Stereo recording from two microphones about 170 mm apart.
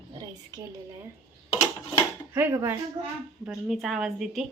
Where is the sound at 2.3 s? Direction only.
15° right (ahead or behind).